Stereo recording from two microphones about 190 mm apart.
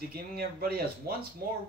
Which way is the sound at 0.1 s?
55° right (ahead or behind).